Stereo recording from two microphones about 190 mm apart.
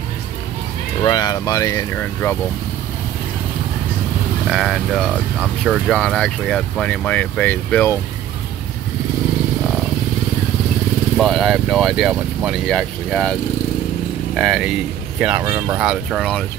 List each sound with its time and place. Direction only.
1.0 s speech: 20° left (ahead or behind)
4.5 s speech: centre (ahead or behind)
11.1 s speech: centre (ahead or behind)
15.4 s speech: 15° right (ahead or behind)
15.8 s speech: centre (ahead or behind)